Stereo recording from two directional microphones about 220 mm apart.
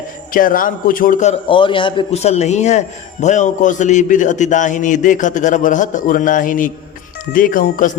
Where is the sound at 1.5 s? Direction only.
20° left (ahead or behind).